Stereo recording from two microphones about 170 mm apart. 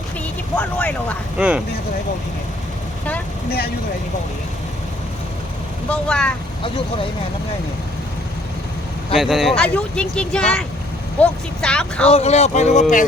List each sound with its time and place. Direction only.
0.5 s speech: 10° left (ahead or behind)
1.4 s speech: 5° right (ahead or behind)
5.9 s speech: 5° left (ahead or behind)
9.1 s speech: centre (ahead or behind)
12.0 s speech: 40° left (ahead or behind)